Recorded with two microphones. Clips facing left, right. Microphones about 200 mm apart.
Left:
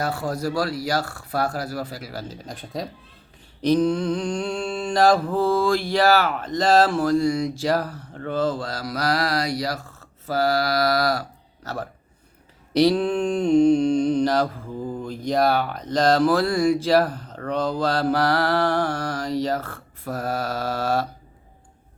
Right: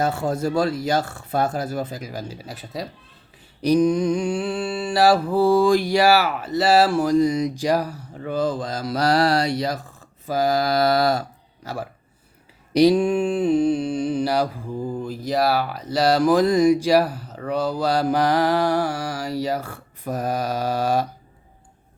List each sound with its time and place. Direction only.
0.0 s speech: 25° right (ahead or behind); by 2.9 s 5° right (ahead or behind)
3.6 s mantra: 10° right (ahead or behind)
11.6 s speech: 10° right (ahead or behind)
12.7 s mantra: 15° right (ahead or behind)